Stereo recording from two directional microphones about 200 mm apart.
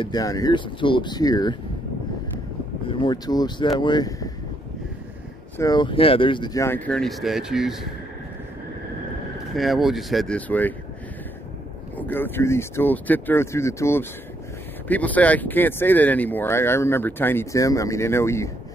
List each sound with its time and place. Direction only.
0.0 s speech: 20° left (ahead or behind)
2.9 s speech: 20° left (ahead or behind)
5.6 s speech: 20° left (ahead or behind); by 7.8 s centre (ahead or behind)
9.6 s speech: centre (ahead or behind)
12.0 s speech: 10° left (ahead or behind)